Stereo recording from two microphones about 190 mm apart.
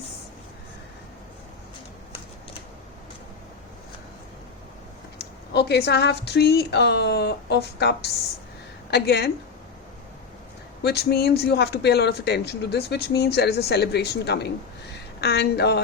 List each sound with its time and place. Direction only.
5.2 s speech: 60° left (ahead or behind)
10.8 s a woman's voice: 55° left (ahead or behind)